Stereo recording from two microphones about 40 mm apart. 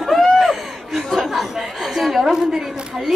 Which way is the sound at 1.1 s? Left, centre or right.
Centre.